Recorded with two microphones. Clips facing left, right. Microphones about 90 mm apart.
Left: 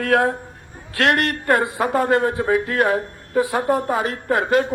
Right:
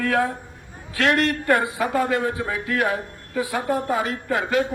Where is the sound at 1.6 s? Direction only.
45° left (ahead or behind).